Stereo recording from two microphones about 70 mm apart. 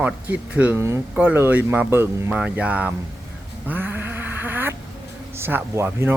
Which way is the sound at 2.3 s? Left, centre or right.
Centre.